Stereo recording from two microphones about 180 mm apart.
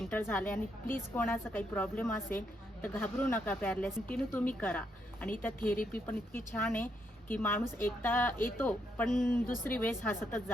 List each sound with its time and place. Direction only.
0.0 s speech: 10° left (ahead or behind)
5.5 s speech: 50° left (ahead or behind)
6.1 s speech: 10° left (ahead or behind)